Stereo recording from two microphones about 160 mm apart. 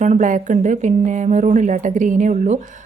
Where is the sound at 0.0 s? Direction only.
50° right (ahead or behind).